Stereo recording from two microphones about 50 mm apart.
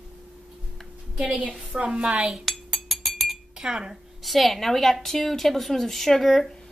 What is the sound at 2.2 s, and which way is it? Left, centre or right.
Cutlery, centre.